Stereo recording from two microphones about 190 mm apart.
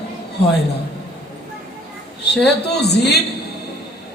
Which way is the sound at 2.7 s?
60° left (ahead or behind).